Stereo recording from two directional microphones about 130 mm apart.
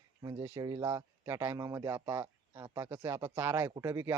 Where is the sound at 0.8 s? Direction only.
20° right (ahead or behind).